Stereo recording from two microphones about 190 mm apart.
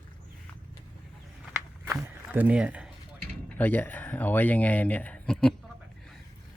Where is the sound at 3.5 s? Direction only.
10° left (ahead or behind).